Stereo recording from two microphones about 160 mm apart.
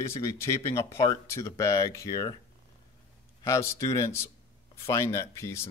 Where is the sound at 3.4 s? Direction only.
20° left (ahead or behind).